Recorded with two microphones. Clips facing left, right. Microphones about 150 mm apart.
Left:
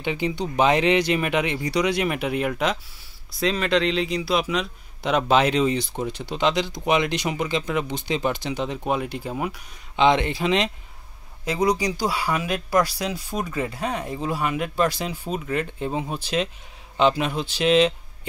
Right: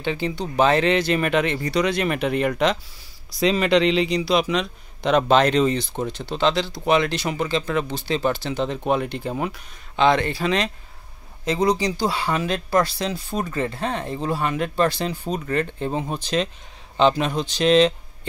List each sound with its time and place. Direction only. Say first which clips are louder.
0.0 s speech: even; 15° left (ahead or behind)
9.5 s speech: even; 20° left (ahead or behind)